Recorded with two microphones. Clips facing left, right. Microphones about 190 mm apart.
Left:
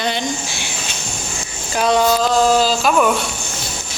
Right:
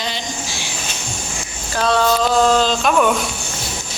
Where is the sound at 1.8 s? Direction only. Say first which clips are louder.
Left 1 dB; 15° left (ahead or behind).